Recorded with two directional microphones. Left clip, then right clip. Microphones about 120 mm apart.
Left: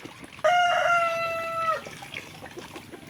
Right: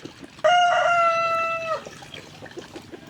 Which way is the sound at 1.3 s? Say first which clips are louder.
Right 3 dB; 25° right (ahead or behind).